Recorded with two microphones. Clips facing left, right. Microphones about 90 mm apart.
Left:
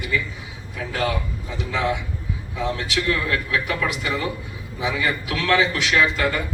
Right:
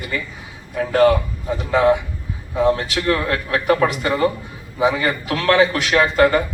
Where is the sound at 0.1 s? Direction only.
45° right (ahead or behind).